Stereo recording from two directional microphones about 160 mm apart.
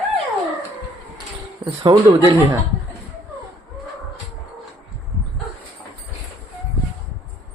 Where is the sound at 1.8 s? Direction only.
35° right (ahead or behind).